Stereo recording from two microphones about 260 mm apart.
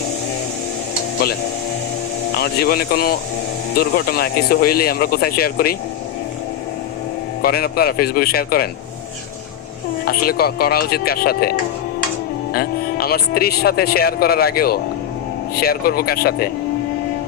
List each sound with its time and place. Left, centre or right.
2.3 s speech: left
7.4 s speech: left
10.1 s speech: left
12.5 s speech: left